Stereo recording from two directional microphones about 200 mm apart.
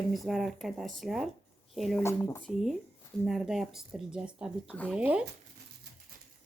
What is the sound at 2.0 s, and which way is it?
Speech, 15° left (ahead or behind).